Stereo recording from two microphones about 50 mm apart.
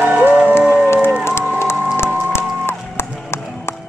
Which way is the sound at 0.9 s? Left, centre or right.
Left.